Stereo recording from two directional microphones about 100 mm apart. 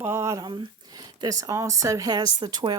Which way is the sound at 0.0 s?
30° right (ahead or behind).